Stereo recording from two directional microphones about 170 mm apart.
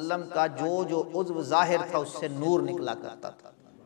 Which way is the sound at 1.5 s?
15° left (ahead or behind).